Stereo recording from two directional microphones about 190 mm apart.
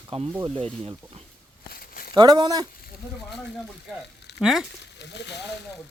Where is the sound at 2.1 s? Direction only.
20° right (ahead or behind).